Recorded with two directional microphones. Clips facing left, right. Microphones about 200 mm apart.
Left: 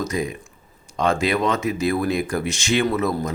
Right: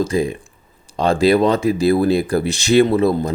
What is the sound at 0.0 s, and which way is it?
Speech, 30° right (ahead or behind).